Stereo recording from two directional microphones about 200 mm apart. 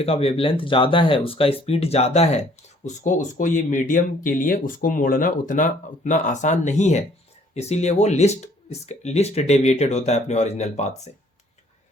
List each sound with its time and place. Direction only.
0.0 s speech: 30° left (ahead or behind)